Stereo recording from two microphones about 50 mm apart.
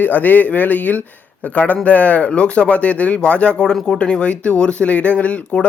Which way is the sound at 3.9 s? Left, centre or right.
Centre.